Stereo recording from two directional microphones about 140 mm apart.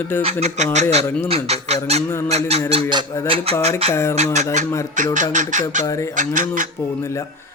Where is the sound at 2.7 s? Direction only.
35° right (ahead or behind).